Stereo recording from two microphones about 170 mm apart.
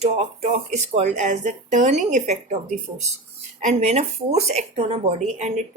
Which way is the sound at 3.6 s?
40° right (ahead or behind).